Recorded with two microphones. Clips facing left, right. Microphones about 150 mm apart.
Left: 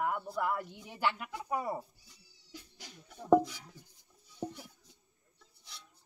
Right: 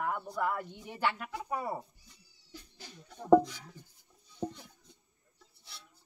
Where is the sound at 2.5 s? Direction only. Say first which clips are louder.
Even; 15° left (ahead or behind).